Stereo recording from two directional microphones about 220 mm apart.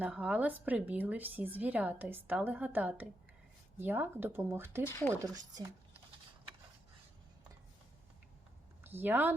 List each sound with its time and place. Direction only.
0.0 s speech: 5° right (ahead or behind)
4.8 s speech: 10° left (ahead or behind)
5.2 s speech: 15° right (ahead or behind)
8.8 s speech: 10° right (ahead or behind)